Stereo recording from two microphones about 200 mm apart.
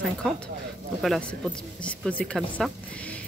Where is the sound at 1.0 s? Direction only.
Centre (ahead or behind).